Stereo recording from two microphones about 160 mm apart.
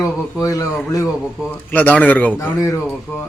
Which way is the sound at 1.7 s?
10° left (ahead or behind).